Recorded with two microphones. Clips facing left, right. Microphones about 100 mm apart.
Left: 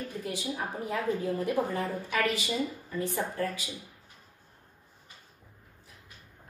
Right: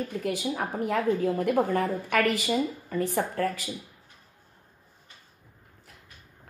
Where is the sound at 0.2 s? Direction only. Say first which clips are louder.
Right 4 dB; 65° right (ahead or behind).